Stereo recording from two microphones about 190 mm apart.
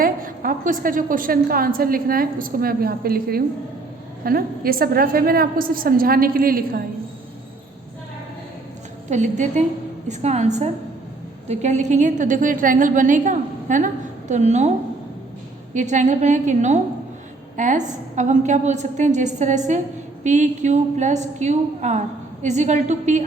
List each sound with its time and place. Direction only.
0.0 s a woman's voice: 45° right (ahead or behind)
9.0 s a woman's voice: 40° right (ahead or behind)
15.7 s a woman's voice: 40° right (ahead or behind)